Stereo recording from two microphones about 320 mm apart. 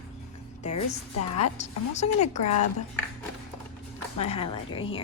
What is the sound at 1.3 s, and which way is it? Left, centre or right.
A woman's voice, centre.